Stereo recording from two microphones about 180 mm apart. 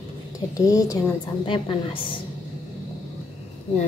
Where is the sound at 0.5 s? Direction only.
20° left (ahead or behind).